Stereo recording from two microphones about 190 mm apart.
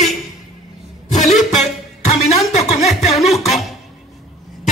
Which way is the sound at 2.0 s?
35° left (ahead or behind).